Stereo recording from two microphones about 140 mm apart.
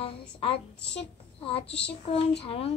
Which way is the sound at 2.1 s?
40° left (ahead or behind).